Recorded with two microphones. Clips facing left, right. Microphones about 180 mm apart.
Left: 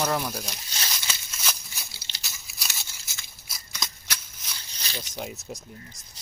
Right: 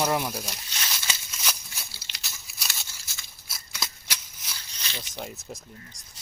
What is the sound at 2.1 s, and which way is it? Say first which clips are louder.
Biting: even; 30° left (ahead or behind).